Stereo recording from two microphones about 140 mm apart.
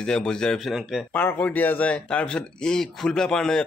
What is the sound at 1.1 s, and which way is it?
Speech, 10° left (ahead or behind).